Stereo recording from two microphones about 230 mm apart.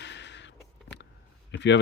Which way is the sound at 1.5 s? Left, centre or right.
Left.